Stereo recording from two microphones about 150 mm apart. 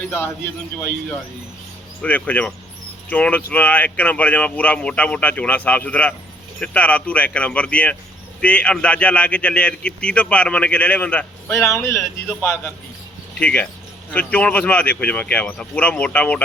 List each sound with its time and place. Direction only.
2.0 s speech: 10° left (ahead or behind)
13.4 s speech: 10° left (ahead or behind)